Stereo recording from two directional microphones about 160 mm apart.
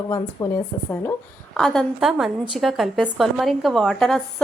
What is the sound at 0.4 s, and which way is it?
Speech, 20° left (ahead or behind).